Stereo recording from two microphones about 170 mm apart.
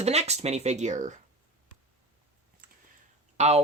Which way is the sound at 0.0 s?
40° right (ahead or behind).